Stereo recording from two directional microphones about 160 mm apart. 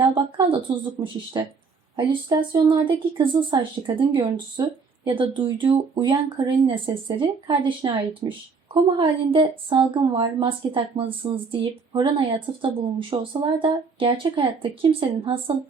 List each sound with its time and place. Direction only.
0.0 s a woman's voice: 30° right (ahead or behind)